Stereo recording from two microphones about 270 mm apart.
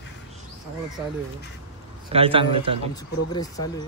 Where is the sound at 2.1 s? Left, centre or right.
Right.